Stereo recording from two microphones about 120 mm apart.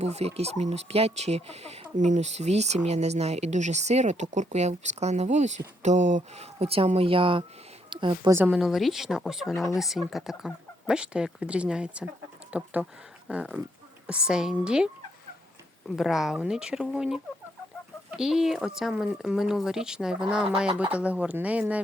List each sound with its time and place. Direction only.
0.0 s speech: 65° right (ahead or behind); by 8.3 s 40° right (ahead or behind)
8.3 s a woman's voice: 20° right (ahead or behind)
8.5 s speech: centre (ahead or behind)
16.0 s speech: centre (ahead or behind)